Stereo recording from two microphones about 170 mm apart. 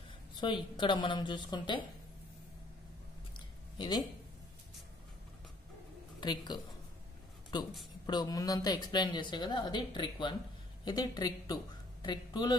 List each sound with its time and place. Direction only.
0.4 s speech: 25° left (ahead or behind)
3.3 s a sound: 25° left (ahead or behind)
6.2 s speech: 25° left (ahead or behind)